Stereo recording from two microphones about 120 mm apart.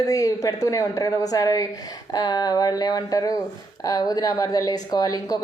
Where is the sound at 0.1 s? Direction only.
30° left (ahead or behind).